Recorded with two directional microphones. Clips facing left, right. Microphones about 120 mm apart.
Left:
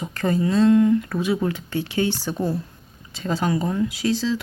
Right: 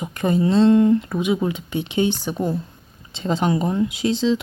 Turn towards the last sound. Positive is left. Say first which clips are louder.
# right 3 dB
turn(degrees=-20)  # may be behind; listen again after turning